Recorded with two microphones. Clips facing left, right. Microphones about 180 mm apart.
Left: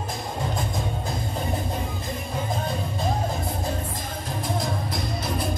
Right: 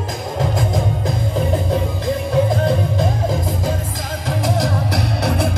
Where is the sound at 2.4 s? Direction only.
90° right.